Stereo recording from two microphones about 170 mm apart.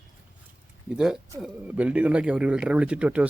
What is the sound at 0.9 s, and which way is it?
Speech, 5° right (ahead or behind).